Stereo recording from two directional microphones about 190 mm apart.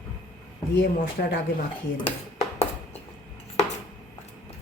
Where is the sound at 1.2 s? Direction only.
55° left (ahead or behind).